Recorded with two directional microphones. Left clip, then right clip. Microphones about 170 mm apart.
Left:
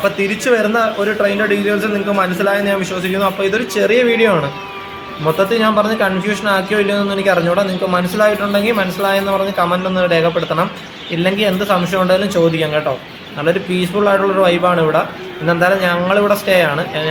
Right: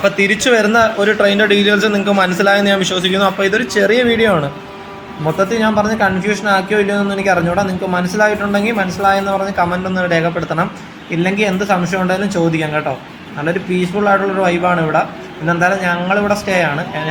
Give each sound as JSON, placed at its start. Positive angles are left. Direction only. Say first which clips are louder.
{"t": 0.0, "sound": "speech", "louder": "right 3 dB", "side_deg": -10}
{"t": 5.4, "sound": "a man's voice", "louder": "left 1 dB", "side_deg": 5}
{"t": 14.0, "sound": "a man's voice", "louder": "left 2 dB", "side_deg": 15}